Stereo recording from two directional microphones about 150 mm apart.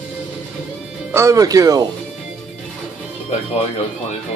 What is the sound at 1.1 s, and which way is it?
Speech, 20° right (ahead or behind).